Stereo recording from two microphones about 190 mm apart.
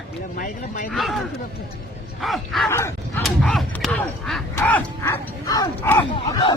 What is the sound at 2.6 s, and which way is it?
Speech, 15° left (ahead or behind).